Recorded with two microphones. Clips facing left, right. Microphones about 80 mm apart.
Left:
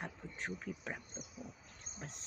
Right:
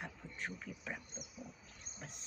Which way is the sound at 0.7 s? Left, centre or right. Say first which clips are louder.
Left 2 dB; left.